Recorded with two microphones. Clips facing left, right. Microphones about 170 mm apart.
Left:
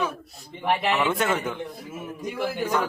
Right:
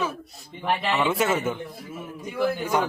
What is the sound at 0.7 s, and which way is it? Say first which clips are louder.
Speech: left 1 dB; 10° left (ahead or behind).